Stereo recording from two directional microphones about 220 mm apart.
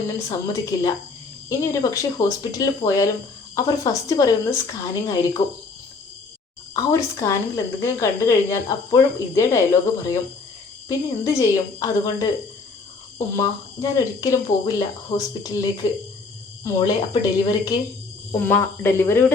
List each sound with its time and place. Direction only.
0.3 s a woman's voice: 15° left (ahead or behind)
6.7 s a woman's voice: 15° left (ahead or behind)
10.8 s a woman's voice: 15° left (ahead or behind)